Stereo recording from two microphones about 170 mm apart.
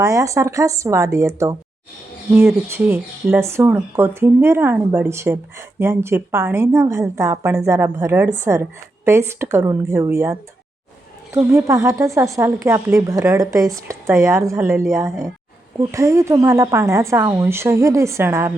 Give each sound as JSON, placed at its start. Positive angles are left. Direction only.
{"t": 0.0, "sound": "speech", "side_deg": -20}
{"t": 2.6, "sound": "speech", "side_deg": -10}
{"t": 11.5, "sound": "speech", "side_deg": -15}